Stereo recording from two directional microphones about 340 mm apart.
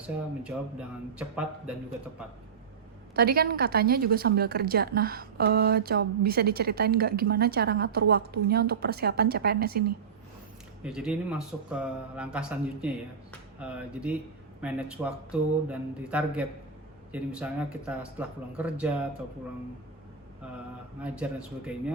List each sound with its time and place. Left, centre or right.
0.5 s speech: centre
3.2 s a woman's voice: right
10.8 s speech: centre
21.0 s speech: centre